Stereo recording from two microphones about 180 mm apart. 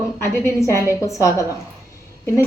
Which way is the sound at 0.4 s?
15° left (ahead or behind).